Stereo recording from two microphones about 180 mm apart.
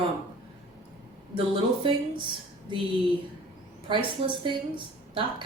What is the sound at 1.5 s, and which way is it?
Speech, 25° right (ahead or behind).